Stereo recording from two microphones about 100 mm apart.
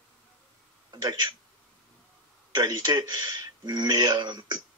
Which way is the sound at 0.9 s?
45° right (ahead or behind).